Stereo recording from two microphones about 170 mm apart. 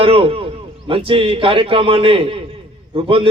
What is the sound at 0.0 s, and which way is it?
A man's voice, 35° right (ahead or behind).